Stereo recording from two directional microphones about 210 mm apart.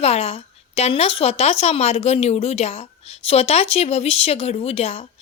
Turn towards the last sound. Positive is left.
turn(degrees=30)  # may be behind; listen again after turning